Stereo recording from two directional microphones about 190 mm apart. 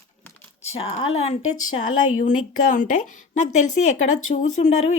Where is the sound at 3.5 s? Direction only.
40° left (ahead or behind).